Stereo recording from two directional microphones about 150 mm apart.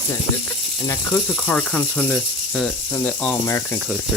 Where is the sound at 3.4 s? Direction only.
20° left (ahead or behind).